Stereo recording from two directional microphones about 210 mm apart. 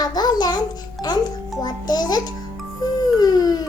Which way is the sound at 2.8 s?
20° left (ahead or behind).